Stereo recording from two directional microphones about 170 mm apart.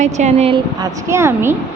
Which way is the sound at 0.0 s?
40° right (ahead or behind).